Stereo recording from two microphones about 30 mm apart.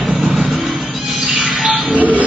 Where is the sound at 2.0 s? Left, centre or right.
Right.